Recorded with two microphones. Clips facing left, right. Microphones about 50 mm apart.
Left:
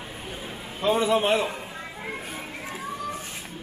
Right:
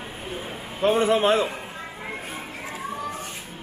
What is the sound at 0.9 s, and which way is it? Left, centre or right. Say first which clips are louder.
Speech: right 2 dB; right.